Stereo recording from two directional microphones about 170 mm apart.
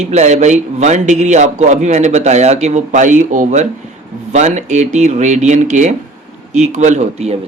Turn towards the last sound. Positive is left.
turn(degrees=-40)  # may be behind; listen again after turning